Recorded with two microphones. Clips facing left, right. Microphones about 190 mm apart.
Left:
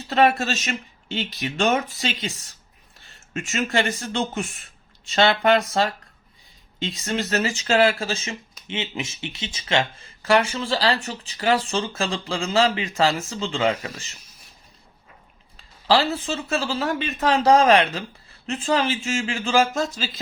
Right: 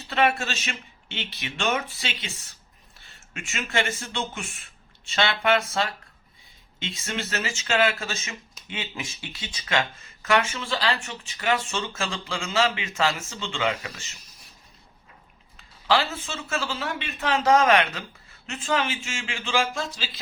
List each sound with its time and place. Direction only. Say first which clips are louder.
0.1 s speech: left 5 dB; 40° left (ahead or behind)
3.3 s speech: left 5 dB; 40° left (ahead or behind)
15.5 s speech: left 4 dB; 35° left (ahead or behind)